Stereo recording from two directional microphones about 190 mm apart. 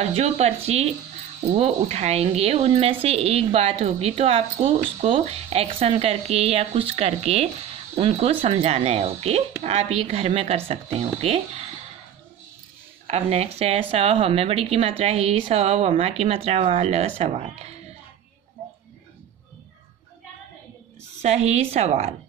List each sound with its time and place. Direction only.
0.0 s a woman's voice: 35° right (ahead or behind)
13.0 s a woman's voice: 35° right (ahead or behind)
21.2 s a woman's voice: 35° right (ahead or behind)